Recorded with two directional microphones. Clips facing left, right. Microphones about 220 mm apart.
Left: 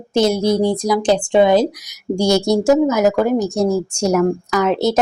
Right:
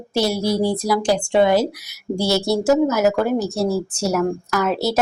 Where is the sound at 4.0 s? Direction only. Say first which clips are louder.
Left 4 dB; 5° right (ahead or behind).